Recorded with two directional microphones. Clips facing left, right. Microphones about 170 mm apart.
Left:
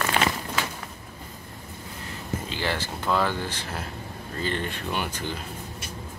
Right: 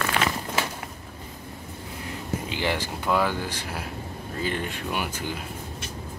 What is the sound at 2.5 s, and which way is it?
Speech, 15° right (ahead or behind).